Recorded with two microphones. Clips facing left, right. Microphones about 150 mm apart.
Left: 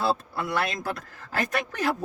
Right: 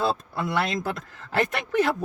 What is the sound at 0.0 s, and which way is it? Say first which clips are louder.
Speech: right 1 dB; 20° right (ahead or behind).